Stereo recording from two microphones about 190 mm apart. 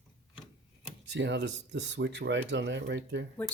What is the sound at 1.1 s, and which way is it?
Speech, 65° right (ahead or behind).